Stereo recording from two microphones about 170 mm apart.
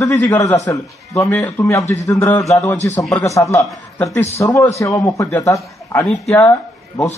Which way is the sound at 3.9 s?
20° left (ahead or behind).